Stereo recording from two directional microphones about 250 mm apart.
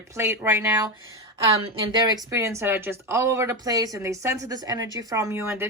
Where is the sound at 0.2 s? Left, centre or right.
Centre.